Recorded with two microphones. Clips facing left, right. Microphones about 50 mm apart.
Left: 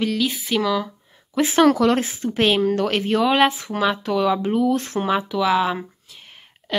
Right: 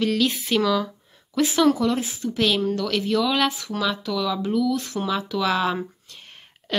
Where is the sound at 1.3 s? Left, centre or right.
Left.